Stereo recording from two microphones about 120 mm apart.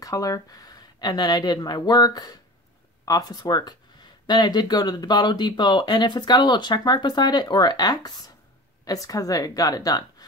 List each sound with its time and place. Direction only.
0.0 s a woman's voice: 30° left (ahead or behind)